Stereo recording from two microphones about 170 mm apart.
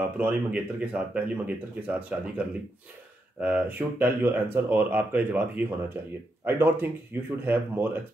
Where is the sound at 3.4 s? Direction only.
10° right (ahead or behind).